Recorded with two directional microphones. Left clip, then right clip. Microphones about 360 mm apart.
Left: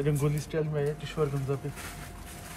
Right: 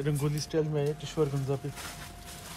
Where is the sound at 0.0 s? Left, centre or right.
Centre.